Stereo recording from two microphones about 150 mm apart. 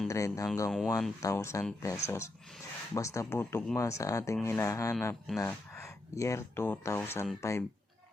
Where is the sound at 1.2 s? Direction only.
20° left (ahead or behind).